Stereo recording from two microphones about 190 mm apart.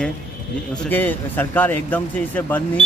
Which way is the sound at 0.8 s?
10° left (ahead or behind).